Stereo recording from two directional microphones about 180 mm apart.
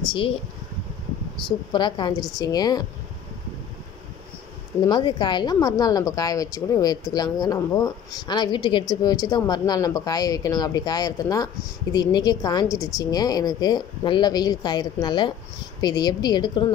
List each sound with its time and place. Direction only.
1.7 s a woman's voice: 25° left (ahead or behind)
4.8 s a woman's voice: 25° left (ahead or behind)